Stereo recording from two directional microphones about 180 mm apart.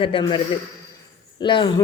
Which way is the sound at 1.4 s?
25° left (ahead or behind).